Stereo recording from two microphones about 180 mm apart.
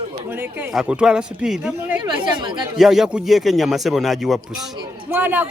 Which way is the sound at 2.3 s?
25° right (ahead or behind).